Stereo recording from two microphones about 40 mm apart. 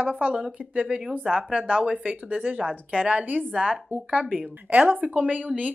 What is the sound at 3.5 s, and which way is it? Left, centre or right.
A woman's voice, right.